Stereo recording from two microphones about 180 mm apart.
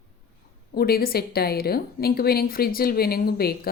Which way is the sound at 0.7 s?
60° left (ahead or behind).